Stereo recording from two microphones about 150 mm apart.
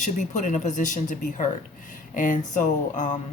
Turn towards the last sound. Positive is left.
turn(degrees=55)  # may be behind; listen again after turning